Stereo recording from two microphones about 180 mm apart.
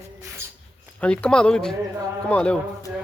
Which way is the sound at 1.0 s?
5° left (ahead or behind).